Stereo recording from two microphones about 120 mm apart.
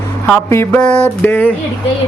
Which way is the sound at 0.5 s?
20° left (ahead or behind).